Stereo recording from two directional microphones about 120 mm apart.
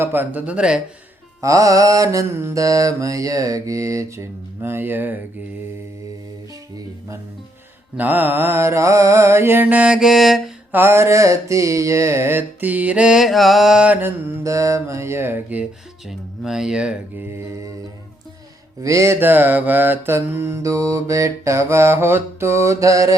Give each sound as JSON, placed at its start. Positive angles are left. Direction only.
{"t": 0.0, "sound": "mantra", "side_deg": -15}
{"t": 1.4, "sound": "mantra", "side_deg": -25}
{"t": 7.9, "sound": "mantra", "side_deg": -15}
{"t": 10.7, "sound": "mantra", "side_deg": -20}
{"t": 14.4, "sound": "mantra", "side_deg": -25}
{"t": 16.0, "sound": "speech", "side_deg": -5}
{"t": 17.3, "sound": "mantra", "side_deg": -25}
{"t": 18.8, "sound": "mantra", "side_deg": -25}